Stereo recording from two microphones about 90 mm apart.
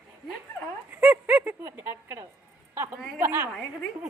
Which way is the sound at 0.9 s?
20° right (ahead or behind).